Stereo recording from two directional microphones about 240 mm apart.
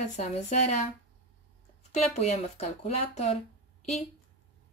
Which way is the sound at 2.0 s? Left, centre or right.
Left.